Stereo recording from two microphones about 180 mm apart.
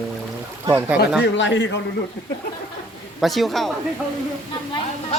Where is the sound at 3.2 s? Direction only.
Centre (ahead or behind).